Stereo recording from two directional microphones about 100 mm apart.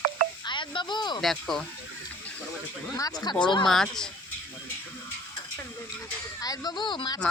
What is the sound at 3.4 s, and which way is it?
Speech, 50° left (ahead or behind).